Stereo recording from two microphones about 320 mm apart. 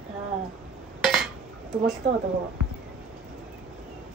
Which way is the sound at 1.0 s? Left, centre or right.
Centre.